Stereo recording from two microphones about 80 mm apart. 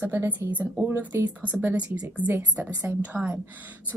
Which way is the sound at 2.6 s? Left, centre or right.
Right.